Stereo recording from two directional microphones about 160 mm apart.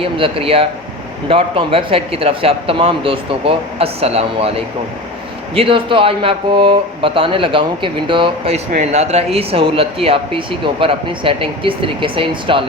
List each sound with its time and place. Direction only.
0.0 s speech: 35° right (ahead or behind)